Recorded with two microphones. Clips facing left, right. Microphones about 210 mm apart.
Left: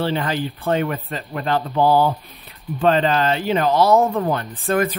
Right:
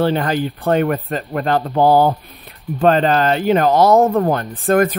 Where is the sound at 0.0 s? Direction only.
45° right (ahead or behind).